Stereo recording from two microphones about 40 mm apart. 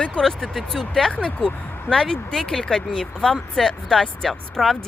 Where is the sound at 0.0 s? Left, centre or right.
Left.